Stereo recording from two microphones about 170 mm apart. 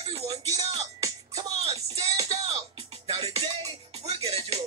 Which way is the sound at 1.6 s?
35° right (ahead or behind).